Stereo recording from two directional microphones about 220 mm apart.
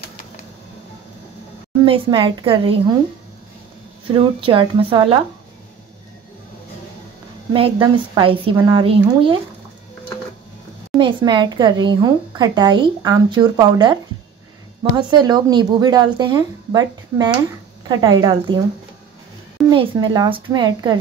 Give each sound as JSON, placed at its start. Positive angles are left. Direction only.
{"t": 1.9, "sound": "speech", "side_deg": -20}
{"t": 4.1, "sound": "speech", "side_deg": -25}
{"t": 7.5, "sound": "speech", "side_deg": -20}
{"t": 11.0, "sound": "speech", "side_deg": -20}
{"t": 19.7, "sound": "speech", "side_deg": -20}